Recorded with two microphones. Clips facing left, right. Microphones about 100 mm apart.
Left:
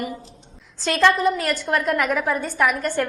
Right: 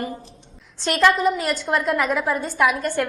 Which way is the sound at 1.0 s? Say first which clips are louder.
Even; 5° right (ahead or behind).